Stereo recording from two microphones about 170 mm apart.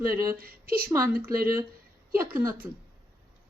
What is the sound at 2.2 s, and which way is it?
Speech, 15° right (ahead or behind).